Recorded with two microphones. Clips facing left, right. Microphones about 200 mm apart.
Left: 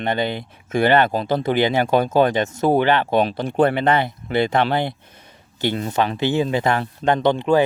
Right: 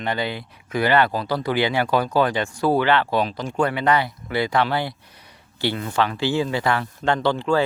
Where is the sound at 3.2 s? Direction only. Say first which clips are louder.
Left 4 dB; 60° left (ahead or behind).